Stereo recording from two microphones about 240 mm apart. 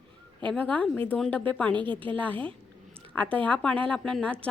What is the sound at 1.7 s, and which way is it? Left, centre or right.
Speech, centre.